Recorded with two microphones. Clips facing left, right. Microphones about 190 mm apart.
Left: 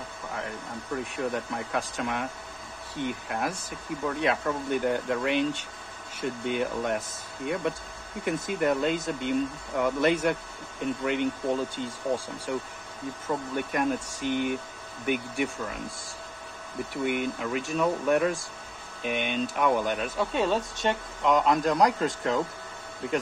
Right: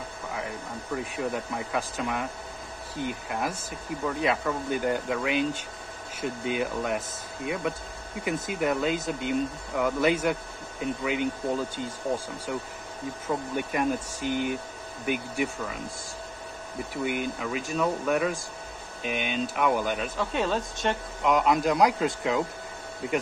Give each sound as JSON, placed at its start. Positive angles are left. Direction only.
{"t": 0.9, "sound": "speech", "side_deg": 0}
{"t": 12.5, "sound": "speech", "side_deg": 0}
{"t": 16.9, "sound": "speech", "side_deg": 0}